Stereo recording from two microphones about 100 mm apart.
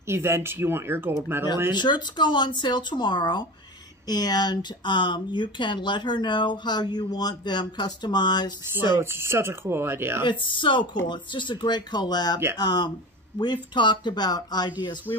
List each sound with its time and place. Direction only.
0.0 s speech: 25° right (ahead or behind)
1.7 s speech: 50° left (ahead or behind)
8.9 s speech: 25° right (ahead or behind)
10.2 s speech: 55° left (ahead or behind)
15.1 s speech: 30° left (ahead or behind)